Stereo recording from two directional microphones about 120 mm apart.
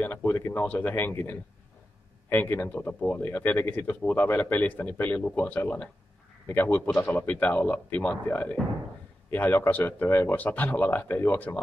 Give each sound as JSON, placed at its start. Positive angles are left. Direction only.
{"t": 0.0, "sound": "speech", "side_deg": 15}